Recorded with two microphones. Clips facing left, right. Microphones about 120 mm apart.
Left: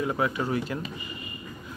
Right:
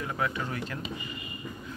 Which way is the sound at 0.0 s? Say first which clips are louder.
Left 5 dB; 15° left (ahead or behind).